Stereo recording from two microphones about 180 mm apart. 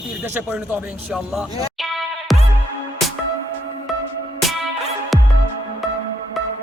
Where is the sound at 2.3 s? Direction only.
Centre (ahead or behind).